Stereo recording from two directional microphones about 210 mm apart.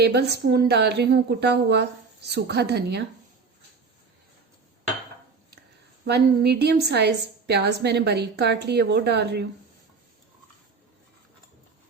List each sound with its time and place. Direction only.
0.0 s a woman's voice: 50° right (ahead or behind)
6.1 s a woman's voice: 50° right (ahead or behind)